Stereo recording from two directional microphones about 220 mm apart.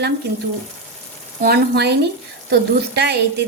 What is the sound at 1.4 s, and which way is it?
A woman's voice, 45° right (ahead or behind).